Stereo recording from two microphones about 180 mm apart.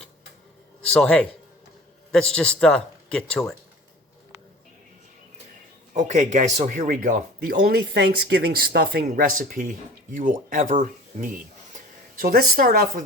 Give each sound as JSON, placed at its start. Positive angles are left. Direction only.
{"t": 0.9, "sound": "speech", "side_deg": 5}
{"t": 5.9, "sound": "speech", "side_deg": -45}